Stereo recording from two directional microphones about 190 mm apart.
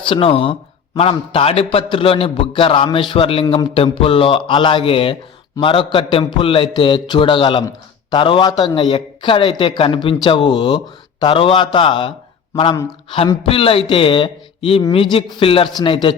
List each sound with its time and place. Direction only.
0.1 s a man's voice: 30° left (ahead or behind)
13.5 s a man's voice: 30° left (ahead or behind)